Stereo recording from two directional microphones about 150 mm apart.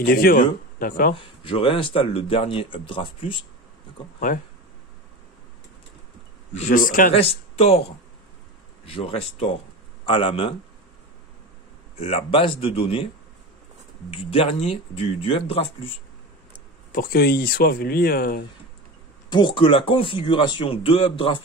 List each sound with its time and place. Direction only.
0.0 s speech: 75° left (ahead or behind)
1.2 s speech: 40° left (ahead or behind)
4.3 s a man's voice: 65° left (ahead or behind)
6.5 s a man's voice: 55° left (ahead or behind)
7.2 s speech: 40° left (ahead or behind)
12.0 s speech: 40° left (ahead or behind)
14.1 s speech: 40° left (ahead or behind)
16.9 s speech: 80° left
19.2 s speech: 30° left (ahead or behind)